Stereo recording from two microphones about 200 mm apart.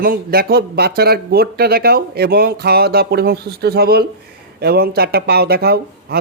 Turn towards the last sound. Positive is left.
turn(degrees=-50)  # may be behind; listen again after turning